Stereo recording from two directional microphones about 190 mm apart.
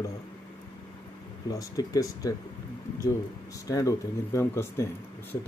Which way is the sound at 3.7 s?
15° left (ahead or behind).